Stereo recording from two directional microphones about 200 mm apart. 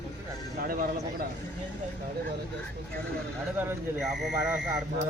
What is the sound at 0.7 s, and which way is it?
Speech, 45° right (ahead or behind).